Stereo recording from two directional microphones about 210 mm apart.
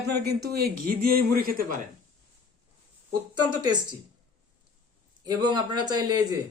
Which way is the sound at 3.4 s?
20° right (ahead or behind).